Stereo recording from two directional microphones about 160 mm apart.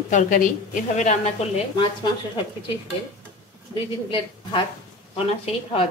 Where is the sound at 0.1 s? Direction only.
55° left (ahead or behind).